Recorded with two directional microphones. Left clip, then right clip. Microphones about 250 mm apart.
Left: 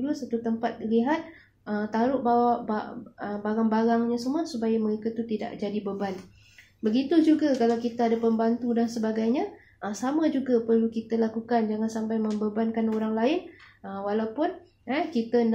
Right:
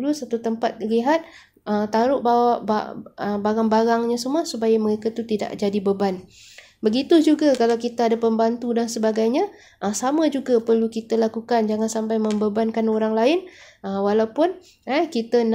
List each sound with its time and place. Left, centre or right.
0.0 s speech: right